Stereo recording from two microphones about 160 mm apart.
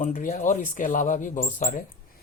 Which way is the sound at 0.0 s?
55° left (ahead or behind).